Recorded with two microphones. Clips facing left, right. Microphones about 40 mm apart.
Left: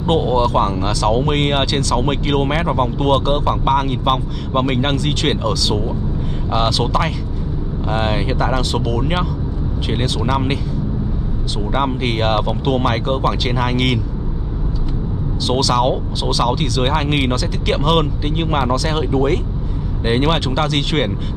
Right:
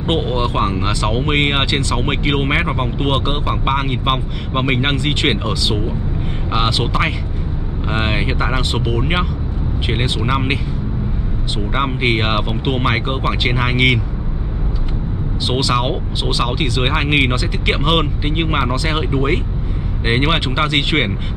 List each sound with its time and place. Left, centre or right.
0.0 s speech: right
10.2 s speech: right
11.7 s speech: right
15.4 s speech: right